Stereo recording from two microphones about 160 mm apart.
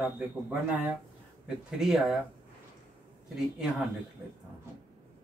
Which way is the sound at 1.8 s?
5° right (ahead or behind).